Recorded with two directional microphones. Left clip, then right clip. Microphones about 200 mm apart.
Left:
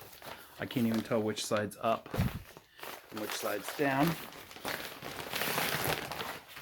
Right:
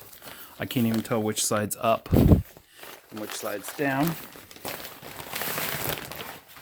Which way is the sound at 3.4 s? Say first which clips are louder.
Right 4 dB; 40° right (ahead or behind).